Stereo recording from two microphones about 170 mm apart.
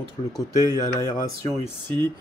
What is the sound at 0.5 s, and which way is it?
Speech, 20° right (ahead or behind).